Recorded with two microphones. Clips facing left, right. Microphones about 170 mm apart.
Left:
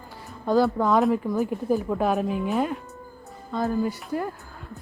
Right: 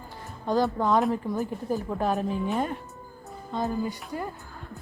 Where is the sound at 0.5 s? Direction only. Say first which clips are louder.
Left 4 dB; 15° right (ahead or behind).